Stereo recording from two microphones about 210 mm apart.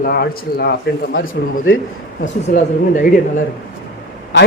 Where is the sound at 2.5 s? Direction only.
40° left (ahead or behind).